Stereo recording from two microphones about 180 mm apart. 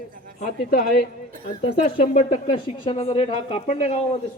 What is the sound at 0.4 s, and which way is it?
Speech, 55° left (ahead or behind).